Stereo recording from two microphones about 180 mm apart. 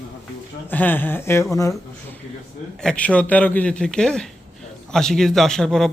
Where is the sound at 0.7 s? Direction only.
10° left (ahead or behind).